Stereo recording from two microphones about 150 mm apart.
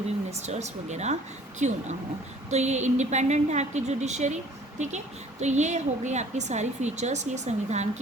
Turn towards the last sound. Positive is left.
turn(degrees=-50)  # may be behind; listen again after turning